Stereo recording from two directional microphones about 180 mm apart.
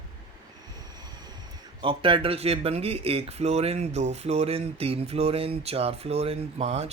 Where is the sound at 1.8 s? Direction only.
30° right (ahead or behind).